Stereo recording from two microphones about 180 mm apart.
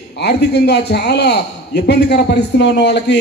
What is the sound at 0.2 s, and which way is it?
A man's voice, 70° left (ahead or behind).